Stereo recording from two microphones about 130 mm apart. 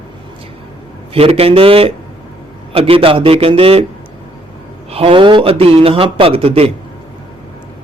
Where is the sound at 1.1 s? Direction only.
50° right (ahead or behind).